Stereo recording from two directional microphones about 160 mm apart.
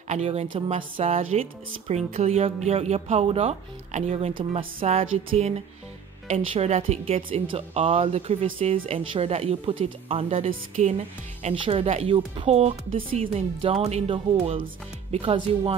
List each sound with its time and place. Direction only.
0.1 s speech: 40° right (ahead or behind)